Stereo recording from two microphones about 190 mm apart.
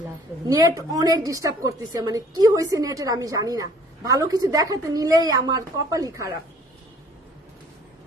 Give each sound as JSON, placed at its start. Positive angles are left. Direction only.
{"t": 0.4, "sound": "a woman's voice", "side_deg": -15}